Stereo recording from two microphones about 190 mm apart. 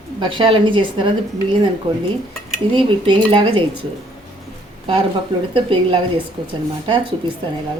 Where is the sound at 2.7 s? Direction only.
25° right (ahead or behind).